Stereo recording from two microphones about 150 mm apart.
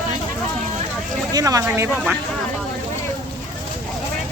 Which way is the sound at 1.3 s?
25° right (ahead or behind).